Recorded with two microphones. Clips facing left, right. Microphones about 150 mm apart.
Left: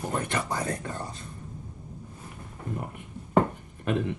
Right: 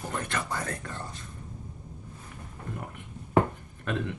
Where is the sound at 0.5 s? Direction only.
20° left (ahead or behind).